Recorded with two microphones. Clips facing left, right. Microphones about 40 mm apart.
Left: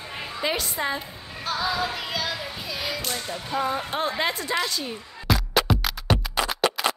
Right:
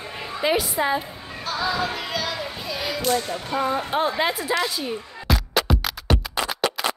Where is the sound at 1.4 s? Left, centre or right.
Centre.